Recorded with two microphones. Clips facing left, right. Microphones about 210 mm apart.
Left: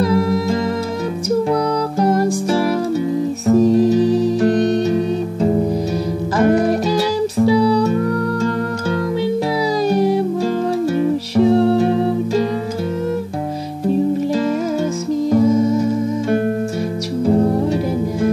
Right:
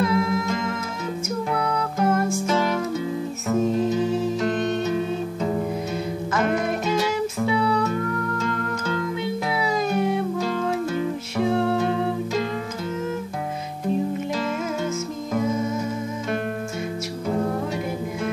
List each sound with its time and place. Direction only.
0.0 s music: 35° left (ahead or behind)
9.8 s music: 35° left (ahead or behind)
15.3 s music: 35° left (ahead or behind)
17.3 s music: 30° left (ahead or behind)